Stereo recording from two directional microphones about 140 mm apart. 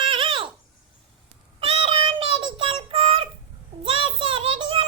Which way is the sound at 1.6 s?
40° right (ahead or behind).